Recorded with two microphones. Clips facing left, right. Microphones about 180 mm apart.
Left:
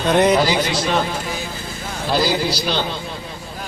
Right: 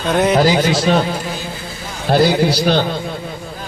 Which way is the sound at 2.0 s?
55° right (ahead or behind).